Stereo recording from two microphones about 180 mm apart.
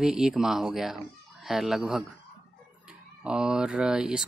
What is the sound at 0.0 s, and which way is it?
Speech, 5° right (ahead or behind).